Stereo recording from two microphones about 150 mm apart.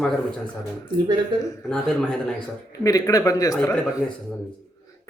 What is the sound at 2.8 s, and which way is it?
Speech, 25° left (ahead or behind).